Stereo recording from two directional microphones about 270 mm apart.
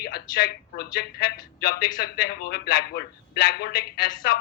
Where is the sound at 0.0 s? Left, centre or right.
Left.